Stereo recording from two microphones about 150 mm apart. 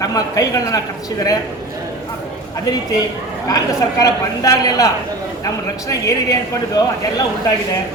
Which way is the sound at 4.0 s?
25° left (ahead or behind).